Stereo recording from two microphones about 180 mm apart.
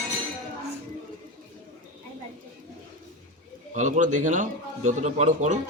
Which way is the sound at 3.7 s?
45° right (ahead or behind).